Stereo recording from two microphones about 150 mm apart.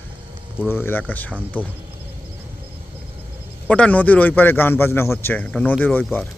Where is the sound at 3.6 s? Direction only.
10° left (ahead or behind).